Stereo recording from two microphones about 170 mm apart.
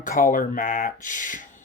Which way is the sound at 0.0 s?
50° left (ahead or behind).